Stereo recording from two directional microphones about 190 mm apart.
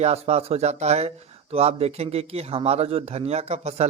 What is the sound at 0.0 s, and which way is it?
Speech, 35° right (ahead or behind).